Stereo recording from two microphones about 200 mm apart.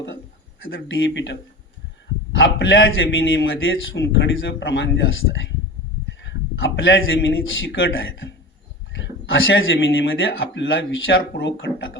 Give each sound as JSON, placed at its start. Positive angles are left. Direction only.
{"t": 0.7, "sound": "speech", "side_deg": 65}
{"t": 2.4, "sound": "a man's voice", "side_deg": 65}